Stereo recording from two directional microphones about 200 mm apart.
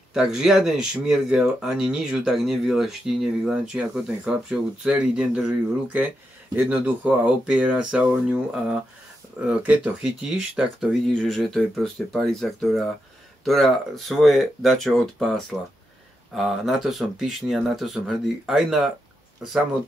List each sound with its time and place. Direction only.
0.1 s speech: centre (ahead or behind)
6.5 s speech: 5° right (ahead or behind)